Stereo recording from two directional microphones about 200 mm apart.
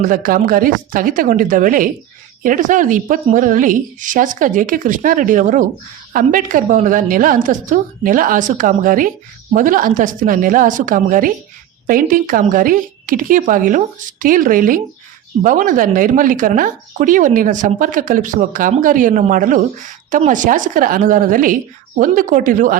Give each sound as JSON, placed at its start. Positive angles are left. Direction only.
{"t": 0.0, "sound": "speech", "side_deg": -45}